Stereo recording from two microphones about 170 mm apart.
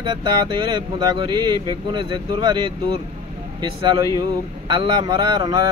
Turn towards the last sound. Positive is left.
turn(degrees=-25)  # may be behind; listen again after turning